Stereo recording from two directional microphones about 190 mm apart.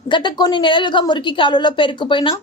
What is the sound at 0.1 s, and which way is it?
A woman's voice, 25° left (ahead or behind).